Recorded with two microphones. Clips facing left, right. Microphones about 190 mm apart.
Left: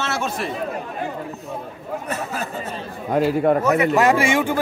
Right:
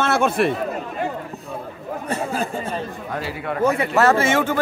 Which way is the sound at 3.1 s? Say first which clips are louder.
Left 12 dB; 45° left (ahead or behind).